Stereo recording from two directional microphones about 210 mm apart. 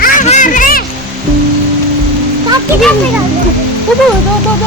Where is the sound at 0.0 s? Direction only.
35° left (ahead or behind).